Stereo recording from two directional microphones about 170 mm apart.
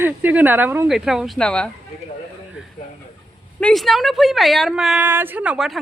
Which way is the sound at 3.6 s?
Centre (ahead or behind).